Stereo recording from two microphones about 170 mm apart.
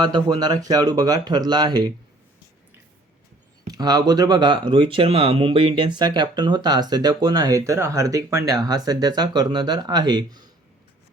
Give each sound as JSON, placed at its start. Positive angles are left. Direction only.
{"t": 0.0, "sound": "speech", "side_deg": -25}
{"t": 3.7, "sound": "speech", "side_deg": -20}